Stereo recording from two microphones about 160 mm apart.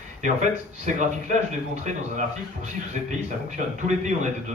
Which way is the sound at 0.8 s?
50° right (ahead or behind).